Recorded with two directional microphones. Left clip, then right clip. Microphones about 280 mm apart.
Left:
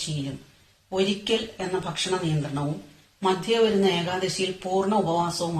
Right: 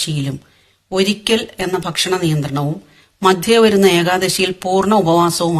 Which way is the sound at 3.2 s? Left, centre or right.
Right.